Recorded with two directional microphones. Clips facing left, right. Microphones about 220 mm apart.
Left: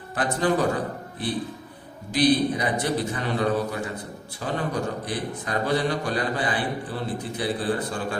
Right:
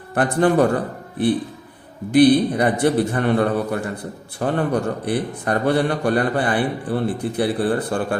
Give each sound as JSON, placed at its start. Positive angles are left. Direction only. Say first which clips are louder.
{"t": 0.1, "sound": "a man's voice", "louder": "right 6 dB", "side_deg": -60}
{"t": 2.1, "sound": "a man's voice", "louder": "right 7 dB", "side_deg": -60}